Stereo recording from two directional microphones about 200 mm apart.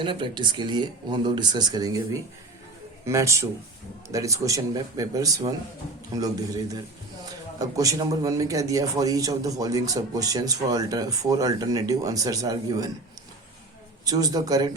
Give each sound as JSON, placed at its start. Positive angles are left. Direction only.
{"t": 0.0, "sound": "speech", "side_deg": -25}
{"t": 3.1, "sound": "a man's voice", "side_deg": -15}
{"t": 7.6, "sound": "a man's voice", "side_deg": -15}
{"t": 14.0, "sound": "speech", "side_deg": -20}